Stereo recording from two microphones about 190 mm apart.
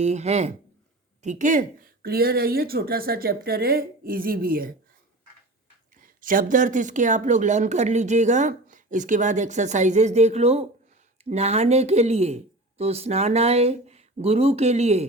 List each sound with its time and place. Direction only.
0.0 s speech: 35° right (ahead or behind)
6.0 s speech: 45° right (ahead or behind)